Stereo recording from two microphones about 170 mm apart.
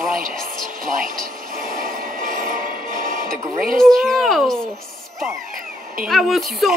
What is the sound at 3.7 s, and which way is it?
Speech, centre (ahead or behind).